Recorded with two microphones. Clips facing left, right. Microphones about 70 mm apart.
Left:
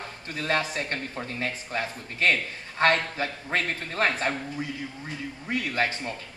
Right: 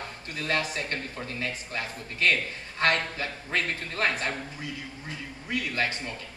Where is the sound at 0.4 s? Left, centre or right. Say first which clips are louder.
Left 2 dB; left.